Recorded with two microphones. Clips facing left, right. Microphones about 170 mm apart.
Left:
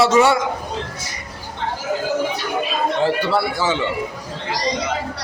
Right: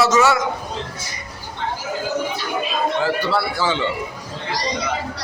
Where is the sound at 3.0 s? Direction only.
20° left (ahead or behind).